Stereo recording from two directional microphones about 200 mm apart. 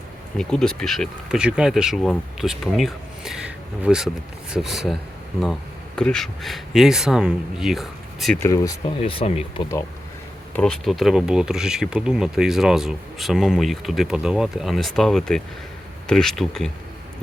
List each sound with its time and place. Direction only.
0.3 s speech: 5° left (ahead or behind)
6.0 s speech: 5° left (ahead or behind)
8.4 s speech: 15° left (ahead or behind)
9.0 s speech: 30° left (ahead or behind)
10.5 s speech: 5° left (ahead or behind)